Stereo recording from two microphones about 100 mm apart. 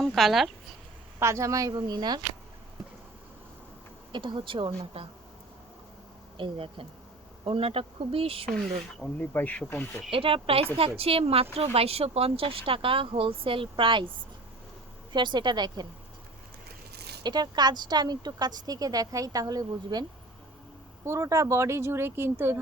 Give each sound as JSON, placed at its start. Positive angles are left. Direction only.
{"t": 0.0, "sound": "speech", "side_deg": 0}
{"t": 1.2, "sound": "speech", "side_deg": -30}
{"t": 4.1, "sound": "speech", "side_deg": -50}
{"t": 6.3, "sound": "speech", "side_deg": -60}
{"t": 8.4, "sound": "speech", "side_deg": 5}
{"t": 9.1, "sound": "speech", "side_deg": 20}
{"t": 10.1, "sound": "speech", "side_deg": -60}
{"t": 11.5, "sound": "speech", "side_deg": -85}
{"t": 15.1, "sound": "a woman's voice", "side_deg": -50}
{"t": 17.2, "sound": "a woman's voice", "side_deg": -45}